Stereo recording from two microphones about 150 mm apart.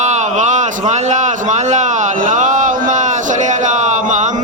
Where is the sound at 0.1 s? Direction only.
55° right (ahead or behind).